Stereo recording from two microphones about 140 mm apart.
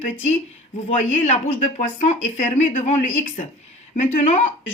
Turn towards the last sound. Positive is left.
turn(degrees=60)  # may be behind; listen again after turning